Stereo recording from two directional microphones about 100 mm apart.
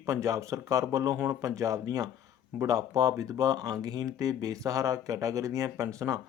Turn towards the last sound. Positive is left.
turn(degrees=-30)  # may be behind; listen again after turning